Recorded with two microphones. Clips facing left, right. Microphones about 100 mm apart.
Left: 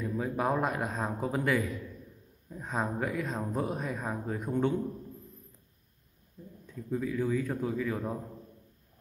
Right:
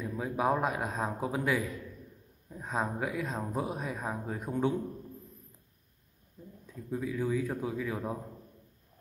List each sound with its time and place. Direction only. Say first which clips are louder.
0.0 s speech: even; centre (ahead or behind)
6.7 s speech: left 2 dB; 5° right (ahead or behind)